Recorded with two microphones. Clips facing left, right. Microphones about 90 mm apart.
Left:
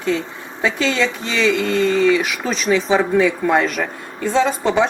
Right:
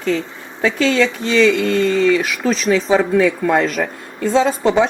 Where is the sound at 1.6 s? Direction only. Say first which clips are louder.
Right 1 dB; 20° left (ahead or behind).